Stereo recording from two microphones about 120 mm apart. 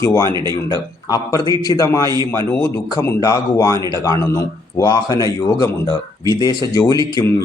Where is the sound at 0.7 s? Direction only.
30° left (ahead or behind).